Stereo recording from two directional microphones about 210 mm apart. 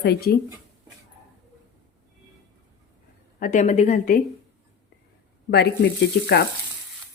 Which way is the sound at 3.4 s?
35° left (ahead or behind).